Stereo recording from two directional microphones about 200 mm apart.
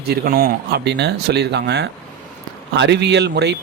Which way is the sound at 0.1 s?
45° right (ahead or behind).